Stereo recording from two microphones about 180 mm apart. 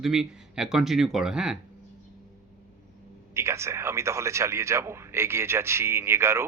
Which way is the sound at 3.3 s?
15° right (ahead or behind).